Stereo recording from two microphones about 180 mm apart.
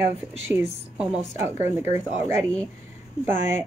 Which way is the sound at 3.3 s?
40° left (ahead or behind).